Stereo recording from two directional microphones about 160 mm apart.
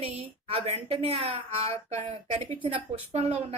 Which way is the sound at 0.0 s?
40° right (ahead or behind).